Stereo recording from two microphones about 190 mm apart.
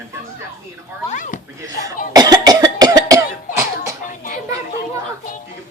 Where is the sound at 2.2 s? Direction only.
20° right (ahead or behind).